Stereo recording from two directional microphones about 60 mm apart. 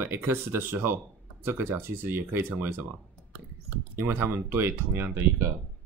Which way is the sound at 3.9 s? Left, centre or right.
Right.